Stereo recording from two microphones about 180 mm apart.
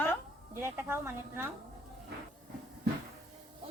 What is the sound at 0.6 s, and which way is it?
Speech, 10° right (ahead or behind).